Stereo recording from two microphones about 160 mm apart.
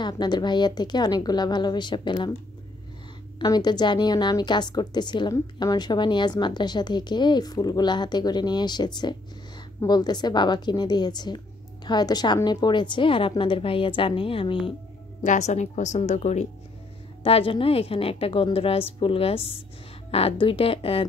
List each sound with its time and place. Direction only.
0.0 s a woman's voice: 25° left (ahead or behind)
3.3 s a woman's voice: 25° left (ahead or behind)
15.2 s speech: 45° left (ahead or behind)
17.2 s a woman's voice: 35° left (ahead or behind)